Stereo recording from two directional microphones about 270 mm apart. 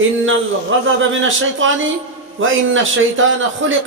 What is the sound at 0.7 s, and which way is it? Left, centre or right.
A man's voice, right.